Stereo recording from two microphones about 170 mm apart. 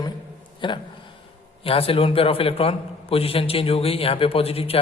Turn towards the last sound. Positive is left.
turn(degrees=35)  # may be behind; listen again after turning